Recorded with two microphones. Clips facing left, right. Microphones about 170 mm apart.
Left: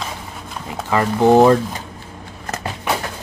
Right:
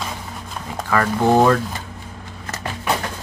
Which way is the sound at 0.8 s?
20° left (ahead or behind).